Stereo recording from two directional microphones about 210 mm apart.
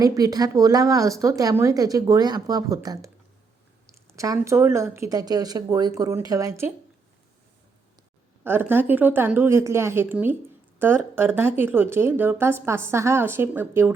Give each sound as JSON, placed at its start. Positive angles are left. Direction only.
{"t": 0.0, "sound": "speech", "side_deg": -15}
{"t": 4.1, "sound": "speech", "side_deg": -15}
{"t": 8.4, "sound": "speech", "side_deg": -10}